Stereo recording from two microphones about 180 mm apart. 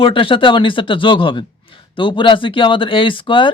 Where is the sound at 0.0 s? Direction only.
30° left (ahead or behind).